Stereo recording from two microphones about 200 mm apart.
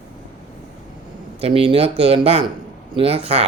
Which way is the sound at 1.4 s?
30° right (ahead or behind).